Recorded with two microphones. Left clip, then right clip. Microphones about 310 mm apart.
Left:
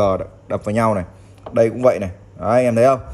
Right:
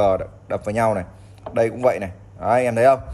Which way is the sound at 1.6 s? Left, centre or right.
Left.